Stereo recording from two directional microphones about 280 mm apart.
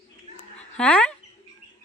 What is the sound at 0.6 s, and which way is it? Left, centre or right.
Dog, centre.